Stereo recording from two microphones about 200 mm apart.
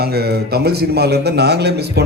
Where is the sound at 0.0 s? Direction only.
55° right (ahead or behind).